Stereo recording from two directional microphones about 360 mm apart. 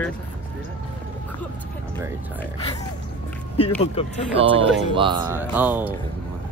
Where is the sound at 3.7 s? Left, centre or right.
Centre.